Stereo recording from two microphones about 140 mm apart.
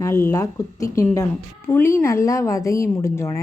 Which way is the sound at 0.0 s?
20° left (ahead or behind).